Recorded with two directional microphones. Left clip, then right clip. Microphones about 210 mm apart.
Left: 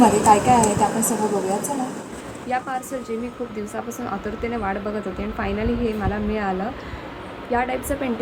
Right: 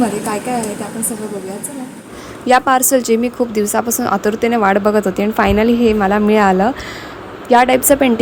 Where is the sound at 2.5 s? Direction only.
40° right (ahead or behind).